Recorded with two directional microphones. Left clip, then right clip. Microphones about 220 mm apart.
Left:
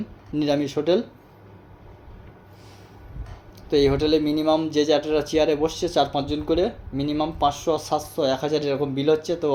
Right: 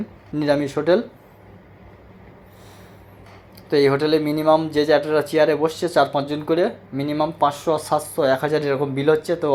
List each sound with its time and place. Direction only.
0.3 s speech: centre (ahead or behind)
3.7 s speech: 5° right (ahead or behind)